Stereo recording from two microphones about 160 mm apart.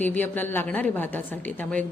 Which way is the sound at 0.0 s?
10° left (ahead or behind).